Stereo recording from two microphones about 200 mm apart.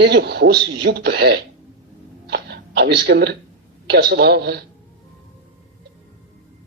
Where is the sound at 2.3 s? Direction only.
55° right (ahead or behind).